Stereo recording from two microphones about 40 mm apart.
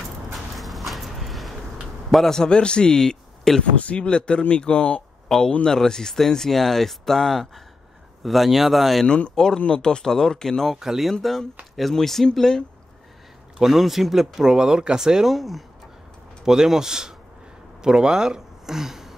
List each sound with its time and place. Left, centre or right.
0.3 s a sound: centre
2.0 s speech: centre
2.3 s speech: left
3.7 s speech: left
5.6 s speech: centre
9.0 s speech: left
9.3 s speech: centre
10.8 s speech: centre
11.9 s speech: centre
13.6 s speech: centre
16.4 s speech: centre